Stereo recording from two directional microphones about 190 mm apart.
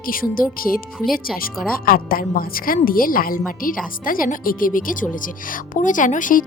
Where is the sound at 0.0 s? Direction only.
50° left (ahead or behind).